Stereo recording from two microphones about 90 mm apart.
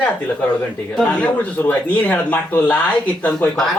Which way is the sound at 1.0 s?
15° left (ahead or behind).